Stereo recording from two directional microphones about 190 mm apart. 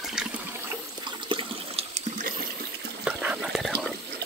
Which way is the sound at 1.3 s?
30° right (ahead or behind).